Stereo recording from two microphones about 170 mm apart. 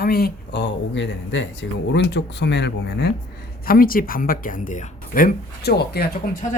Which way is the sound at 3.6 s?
60° left (ahead or behind).